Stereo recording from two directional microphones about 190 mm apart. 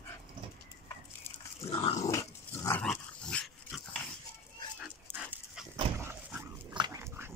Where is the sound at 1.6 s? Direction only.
30° left (ahead or behind).